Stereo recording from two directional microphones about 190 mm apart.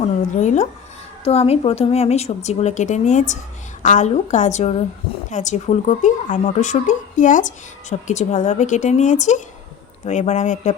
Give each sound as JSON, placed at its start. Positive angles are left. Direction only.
{"t": 0.0, "sound": "a woman's voice", "side_deg": 40}